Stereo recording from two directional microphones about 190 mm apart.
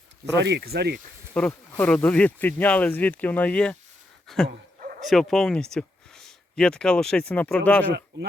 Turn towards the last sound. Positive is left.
turn(degrees=10)  # may be behind; listen again after turning